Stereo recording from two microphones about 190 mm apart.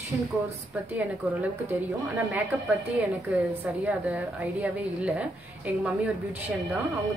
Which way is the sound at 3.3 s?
5° right (ahead or behind).